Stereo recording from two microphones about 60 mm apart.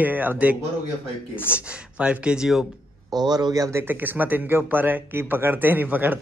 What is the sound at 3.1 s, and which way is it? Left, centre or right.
Speech, right.